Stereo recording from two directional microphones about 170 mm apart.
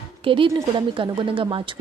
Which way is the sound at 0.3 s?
30° right (ahead or behind).